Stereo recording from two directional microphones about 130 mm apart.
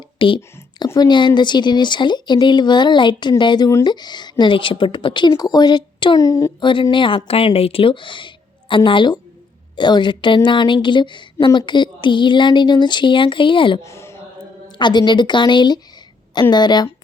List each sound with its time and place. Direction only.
0.2 s a woman's voice: 40° left (ahead or behind)
13.8 s a sound: 20° left (ahead or behind)
14.8 s a woman's voice: 35° left (ahead or behind)